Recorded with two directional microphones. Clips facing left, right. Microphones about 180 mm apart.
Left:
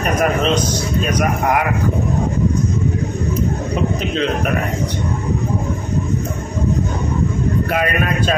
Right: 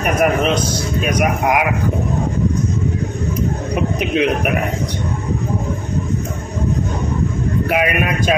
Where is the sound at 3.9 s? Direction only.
15° right (ahead or behind).